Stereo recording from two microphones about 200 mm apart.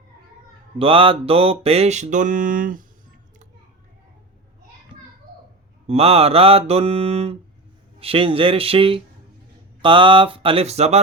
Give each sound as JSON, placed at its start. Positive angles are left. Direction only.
{"t": 0.8, "sound": "mantra", "side_deg": -25}
{"t": 5.9, "sound": "mantra", "side_deg": -30}